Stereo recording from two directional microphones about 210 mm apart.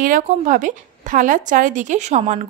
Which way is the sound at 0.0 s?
40° right (ahead or behind).